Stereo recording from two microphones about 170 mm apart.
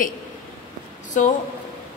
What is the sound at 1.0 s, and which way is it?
Speech, 45° left (ahead or behind).